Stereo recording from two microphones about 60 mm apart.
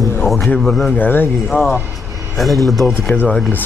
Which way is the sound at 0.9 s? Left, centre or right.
Left.